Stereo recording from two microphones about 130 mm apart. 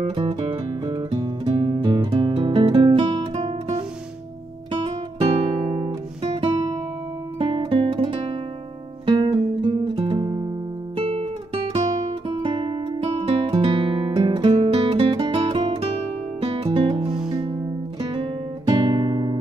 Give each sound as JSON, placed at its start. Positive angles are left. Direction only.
{"t": 0.1, "sound": "music", "side_deg": -40}
{"t": 5.2, "sound": "guitar", "side_deg": -55}
{"t": 9.0, "sound": "music", "side_deg": -40}
{"t": 11.0, "sound": "guitar", "side_deg": -45}
{"t": 12.3, "sound": "music", "side_deg": -40}
{"t": 18.0, "sound": "guitar", "side_deg": -35}